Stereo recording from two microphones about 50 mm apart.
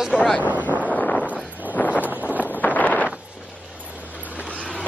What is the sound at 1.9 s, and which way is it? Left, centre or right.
Wind noise, right.